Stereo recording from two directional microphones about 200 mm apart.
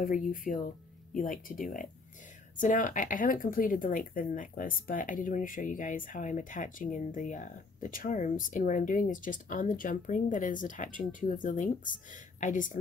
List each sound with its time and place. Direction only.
0.0 s a woman's voice: 45° left (ahead or behind)